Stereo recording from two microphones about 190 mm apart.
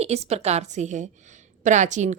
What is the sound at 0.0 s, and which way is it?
A woman's voice, 35° right (ahead or behind).